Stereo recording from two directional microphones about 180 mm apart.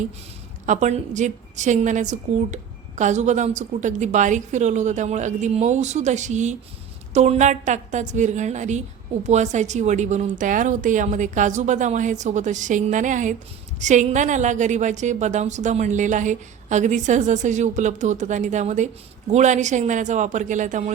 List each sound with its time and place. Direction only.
0.6 s a woman's voice: 45° right (ahead or behind)